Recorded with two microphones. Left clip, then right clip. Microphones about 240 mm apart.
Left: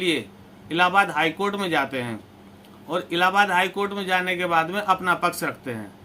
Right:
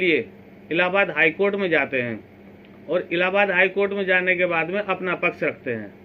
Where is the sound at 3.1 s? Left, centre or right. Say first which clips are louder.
Left 2 dB; left.